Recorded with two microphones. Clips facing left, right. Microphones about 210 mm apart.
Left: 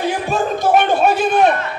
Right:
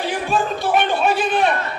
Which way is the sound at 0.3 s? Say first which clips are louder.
Left 4 dB; 45° left (ahead or behind).